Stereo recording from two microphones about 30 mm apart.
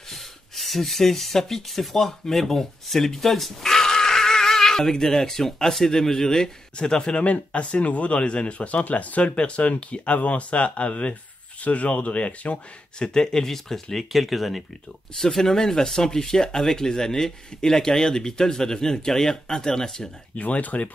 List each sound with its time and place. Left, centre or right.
0.1 s speech: centre
3.7 s speech: centre
7.2 s speech: left
8.9 s speech: left
9.2 s speech: left
13.0 s speech: left
14.1 s speech: centre
15.1 s speech: centre
20.3 s speech: left